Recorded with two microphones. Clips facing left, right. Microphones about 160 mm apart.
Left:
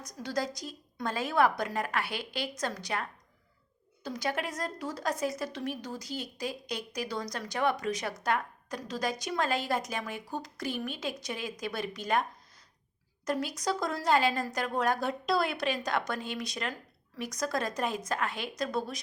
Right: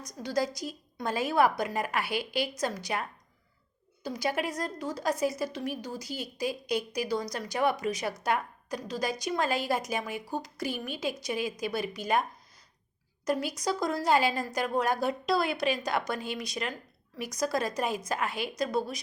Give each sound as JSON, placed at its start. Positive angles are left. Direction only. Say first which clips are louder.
{"t": 0.0, "sound": "a woman's voice", "louder": "right 3 dB", "side_deg": 0}
{"t": 13.2, "sound": "a woman's voice", "louder": "right 2 dB", "side_deg": 0}